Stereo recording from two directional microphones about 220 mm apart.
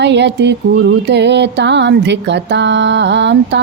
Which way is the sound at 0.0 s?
50° right (ahead or behind).